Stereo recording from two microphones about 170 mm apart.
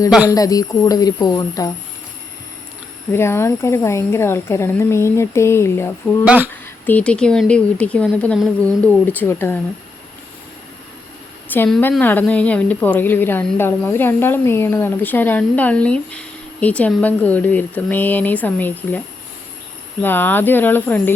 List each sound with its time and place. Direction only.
0.3 s a woman's voice: 20° left (ahead or behind)
3.1 s a woman's voice: 15° left (ahead or behind)
6.2 s speech: 10° right (ahead or behind)
6.8 s a woman's voice: 10° left (ahead or behind)
11.4 s a woman's voice: 10° left (ahead or behind)
20.0 s a woman's voice: 10° left (ahead or behind)